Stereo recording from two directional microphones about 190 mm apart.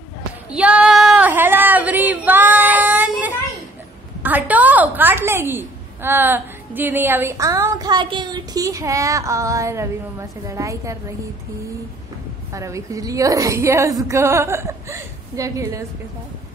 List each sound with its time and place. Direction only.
0.5 s female singing: 5° right (ahead or behind)
4.2 s a woman's voice: 10° right (ahead or behind)
12.5 s a woman's voice: 15° right (ahead or behind)